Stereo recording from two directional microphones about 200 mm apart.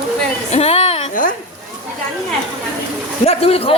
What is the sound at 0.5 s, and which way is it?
Speech, 30° left (ahead or behind).